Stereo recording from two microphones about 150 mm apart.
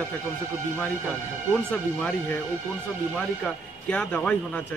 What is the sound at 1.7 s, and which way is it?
A man's voice, 10° left (ahead or behind).